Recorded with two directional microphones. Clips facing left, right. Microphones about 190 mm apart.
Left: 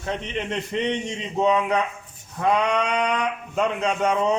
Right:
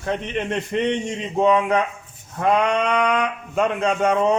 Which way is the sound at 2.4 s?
55° right (ahead or behind).